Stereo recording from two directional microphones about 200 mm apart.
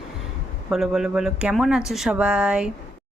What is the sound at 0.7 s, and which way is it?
Speech, centre (ahead or behind).